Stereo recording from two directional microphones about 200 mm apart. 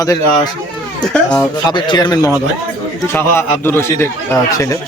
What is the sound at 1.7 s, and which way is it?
A man's voice, 20° left (ahead or behind).